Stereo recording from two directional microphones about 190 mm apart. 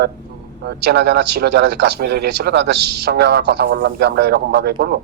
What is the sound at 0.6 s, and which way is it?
Speech, 60° right (ahead or behind).